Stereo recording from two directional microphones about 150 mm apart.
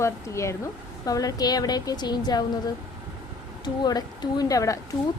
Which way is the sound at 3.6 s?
25° left (ahead or behind).